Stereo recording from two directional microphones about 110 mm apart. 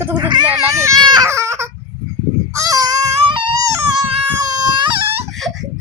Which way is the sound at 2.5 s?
30° right (ahead or behind).